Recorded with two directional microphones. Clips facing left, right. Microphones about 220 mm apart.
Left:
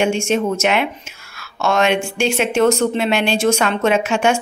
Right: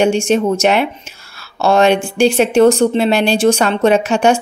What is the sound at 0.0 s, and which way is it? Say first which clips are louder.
A woman's voice: right 4 dB; 35° right (ahead or behind).